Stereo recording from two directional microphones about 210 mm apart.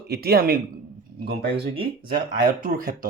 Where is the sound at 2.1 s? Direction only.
40° right (ahead or behind).